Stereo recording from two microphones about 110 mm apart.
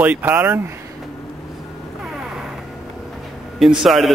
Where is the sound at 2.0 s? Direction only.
5° right (ahead or behind).